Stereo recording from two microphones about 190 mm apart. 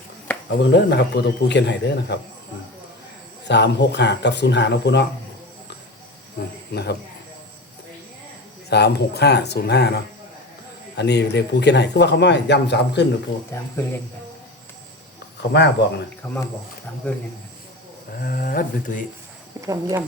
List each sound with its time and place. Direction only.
0.6 s a man's voice: 65° left (ahead or behind)
3.4 s a man's voice: 65° left (ahead or behind)
6.7 s speech: 60° left (ahead or behind)
8.7 s a man's voice: 60° left (ahead or behind)
13.5 s speech: 15° left (ahead or behind)
15.4 s a man's voice: 65° left (ahead or behind)
16.2 s speech: 15° left (ahead or behind)
18.2 s speech: 50° left (ahead or behind)
19.6 s speech: 15° right (ahead or behind)